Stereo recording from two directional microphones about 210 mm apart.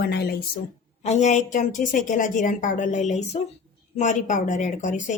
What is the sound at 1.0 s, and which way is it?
Speech, 30° left (ahead or behind).